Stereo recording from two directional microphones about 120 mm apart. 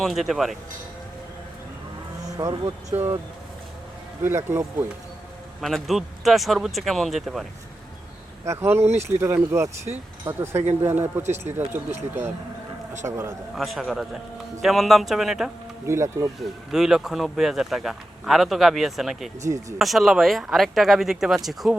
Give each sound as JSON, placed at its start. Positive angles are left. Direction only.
{"t": 0.0, "sound": "speech", "side_deg": 0}
{"t": 2.4, "sound": "speech", "side_deg": -40}
{"t": 2.9, "sound": "speech", "side_deg": -20}
{"t": 4.2, "sound": "speech", "side_deg": -20}
{"t": 5.5, "sound": "speech", "side_deg": 0}
{"t": 8.4, "sound": "speech", "side_deg": -20}
{"t": 13.1, "sound": "speech", "side_deg": -20}
{"t": 13.6, "sound": "speech", "side_deg": 0}
{"t": 15.9, "sound": "speech", "side_deg": -25}
{"t": 16.4, "sound": "speech", "side_deg": -5}
{"t": 19.4, "sound": "speech", "side_deg": -25}
{"t": 19.8, "sound": "speech", "side_deg": 0}